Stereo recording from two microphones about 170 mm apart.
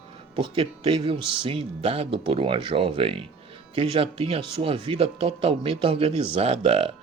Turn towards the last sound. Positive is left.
turn(degrees=-35)  # may be behind; listen again after turning